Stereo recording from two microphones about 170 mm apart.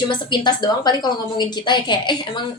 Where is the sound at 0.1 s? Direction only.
25° left (ahead or behind).